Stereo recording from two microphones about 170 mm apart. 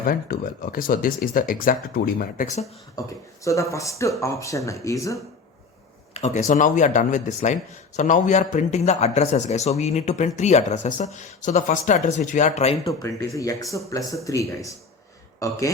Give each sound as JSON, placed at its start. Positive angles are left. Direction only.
{"t": 0.0, "sound": "speech", "side_deg": 55}
{"t": 3.0, "sound": "speech", "side_deg": 20}
{"t": 6.1, "sound": "a man's voice", "side_deg": 40}
{"t": 12.8, "sound": "speech", "side_deg": 20}